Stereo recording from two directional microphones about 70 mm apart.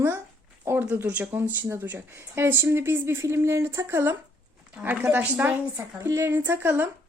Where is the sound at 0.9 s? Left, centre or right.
Right.